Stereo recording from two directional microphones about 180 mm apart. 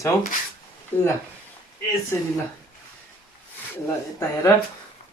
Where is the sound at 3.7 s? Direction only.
15° left (ahead or behind).